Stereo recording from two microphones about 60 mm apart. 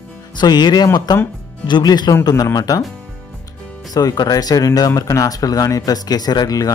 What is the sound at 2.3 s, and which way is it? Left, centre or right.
Speech, left.